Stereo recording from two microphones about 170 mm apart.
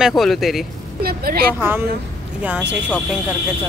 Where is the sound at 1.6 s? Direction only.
15° right (ahead or behind).